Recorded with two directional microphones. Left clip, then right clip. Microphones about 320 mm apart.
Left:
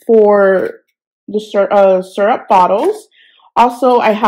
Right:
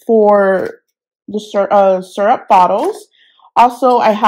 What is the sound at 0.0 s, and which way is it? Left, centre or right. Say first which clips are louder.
Speech: left 1 dB; right.